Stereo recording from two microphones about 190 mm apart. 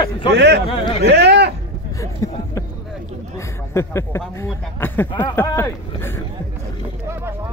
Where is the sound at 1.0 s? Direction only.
60° right (ahead or behind).